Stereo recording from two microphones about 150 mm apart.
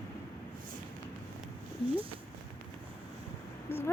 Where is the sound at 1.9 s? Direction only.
35° right (ahead or behind).